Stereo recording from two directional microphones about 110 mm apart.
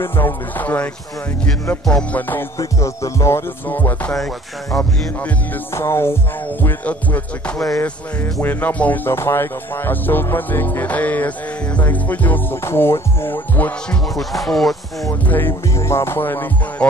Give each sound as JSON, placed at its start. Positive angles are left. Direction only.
{"t": 0.0, "sound": "music", "side_deg": 20}
{"t": 2.6, "sound": "music", "side_deg": 30}
{"t": 5.8, "sound": "music", "side_deg": 25}
{"t": 14.1, "sound": "music", "side_deg": 0}
{"t": 15.0, "sound": "music", "side_deg": 20}